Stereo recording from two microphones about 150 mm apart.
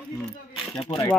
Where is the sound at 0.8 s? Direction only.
40° left (ahead or behind).